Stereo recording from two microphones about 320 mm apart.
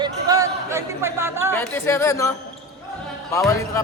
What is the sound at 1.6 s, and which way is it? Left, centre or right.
Speech, centre.